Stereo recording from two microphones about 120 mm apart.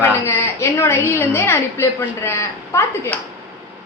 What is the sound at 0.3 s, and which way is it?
A woman's voice, 25° left (ahead or behind).